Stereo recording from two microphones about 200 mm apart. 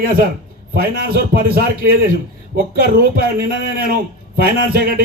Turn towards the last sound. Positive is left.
turn(degrees=-50)  # may be behind; listen again after turning